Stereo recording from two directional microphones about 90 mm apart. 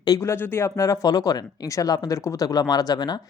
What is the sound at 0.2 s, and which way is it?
A woman's voice, 25° left (ahead or behind).